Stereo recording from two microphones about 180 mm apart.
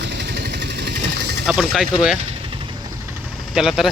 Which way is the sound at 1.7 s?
Centre (ahead or behind).